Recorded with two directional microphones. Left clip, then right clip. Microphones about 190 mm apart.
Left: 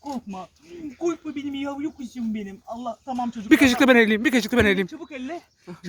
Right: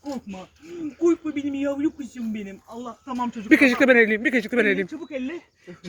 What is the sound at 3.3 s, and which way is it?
Speech, 25° left (ahead or behind).